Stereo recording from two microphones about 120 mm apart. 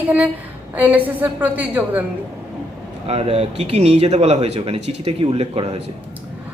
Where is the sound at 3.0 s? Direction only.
55° right (ahead or behind).